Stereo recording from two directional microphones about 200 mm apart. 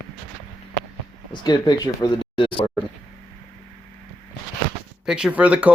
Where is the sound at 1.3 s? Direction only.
20° left (ahead or behind).